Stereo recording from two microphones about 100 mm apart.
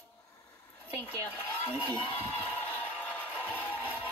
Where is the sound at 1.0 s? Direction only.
20° left (ahead or behind).